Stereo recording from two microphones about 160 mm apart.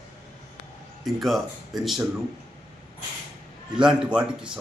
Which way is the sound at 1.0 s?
Centre (ahead or behind).